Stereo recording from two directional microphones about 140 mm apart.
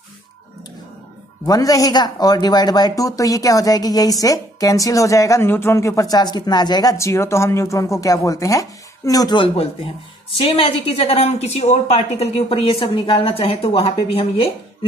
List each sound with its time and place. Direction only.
1.4 s speech: 25° left (ahead or behind); by 14.9 s 40° left (ahead or behind)